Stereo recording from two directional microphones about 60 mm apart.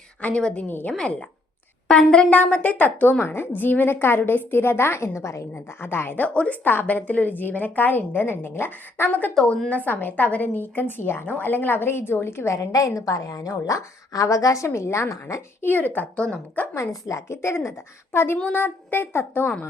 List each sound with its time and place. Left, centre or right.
0.2 s a woman's voice: left
0.9 s a woman's voice: centre; by 5.5 s left
5.5 s a woman's voice: left
6.2 s a woman's voice: left
12.5 s a woman's voice: left
15.4 s a woman's voice: left
16.9 s a woman's voice: left